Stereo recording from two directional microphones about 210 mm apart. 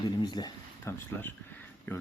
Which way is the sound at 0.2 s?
20° left (ahead or behind).